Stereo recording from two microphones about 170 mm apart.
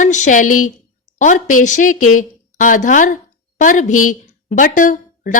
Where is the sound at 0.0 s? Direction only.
45° left (ahead or behind).